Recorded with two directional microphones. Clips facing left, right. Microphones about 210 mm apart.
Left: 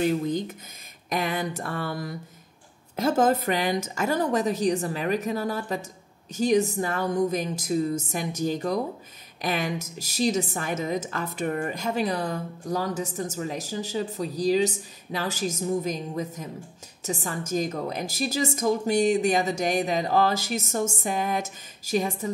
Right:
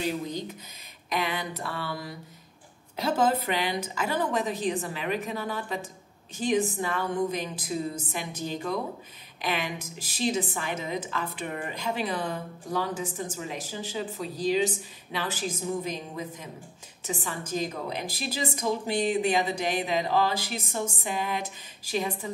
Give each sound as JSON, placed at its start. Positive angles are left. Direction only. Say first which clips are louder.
{"t": 0.0, "sound": "a woman's voice", "louder": "left 6 dB", "side_deg": 50}